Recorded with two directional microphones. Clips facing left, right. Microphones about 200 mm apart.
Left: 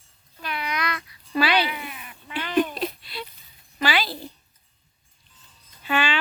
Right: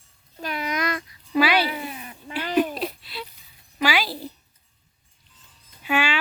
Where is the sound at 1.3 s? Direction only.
10° right (ahead or behind).